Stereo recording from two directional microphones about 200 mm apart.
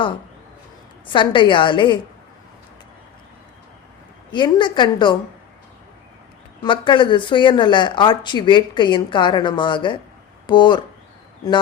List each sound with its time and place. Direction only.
1.0 s speech: 25° left (ahead or behind)
4.3 s speech: 25° left (ahead or behind)
6.6 s speech: 25° left (ahead or behind)